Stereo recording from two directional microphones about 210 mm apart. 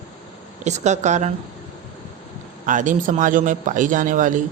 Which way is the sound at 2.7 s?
40° right (ahead or behind).